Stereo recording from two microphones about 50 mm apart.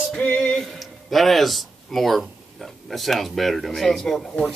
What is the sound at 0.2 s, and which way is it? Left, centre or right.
Music, left.